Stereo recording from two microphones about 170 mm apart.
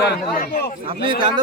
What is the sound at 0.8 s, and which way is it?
Speech, 30° right (ahead or behind).